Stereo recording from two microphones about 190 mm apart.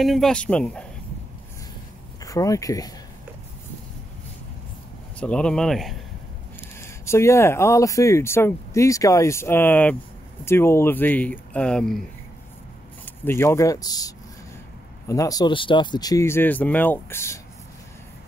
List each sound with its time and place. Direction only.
0.0 s speech: centre (ahead or behind)
2.2 s speech: 15° left (ahead or behind)
5.2 s speech: 5° left (ahead or behind)
6.8 s speech: 15° left (ahead or behind)
13.0 s speech: 10° left (ahead or behind)